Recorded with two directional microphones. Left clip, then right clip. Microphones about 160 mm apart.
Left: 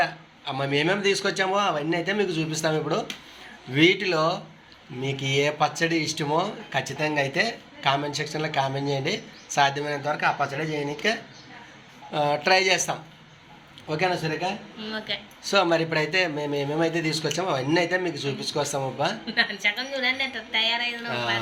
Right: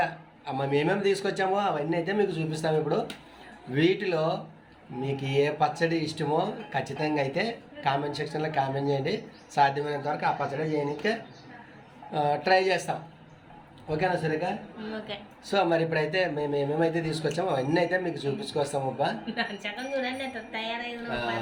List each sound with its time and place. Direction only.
0.0 s a man's voice: centre (ahead or behind)
14.8 s a woman's voice: 15° right (ahead or behind)
15.4 s speech: 10° left (ahead or behind)
19.2 s a woman's voice: 10° right (ahead or behind)